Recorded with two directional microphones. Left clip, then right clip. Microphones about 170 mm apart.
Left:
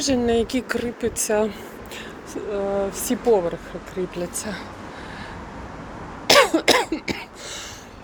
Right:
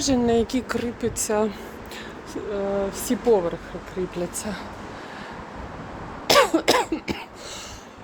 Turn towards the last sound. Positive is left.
turn(degrees=-5)  # may be behind; listen again after turning